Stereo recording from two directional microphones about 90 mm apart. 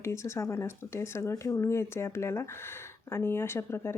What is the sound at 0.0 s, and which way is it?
Speech, 30° left (ahead or behind).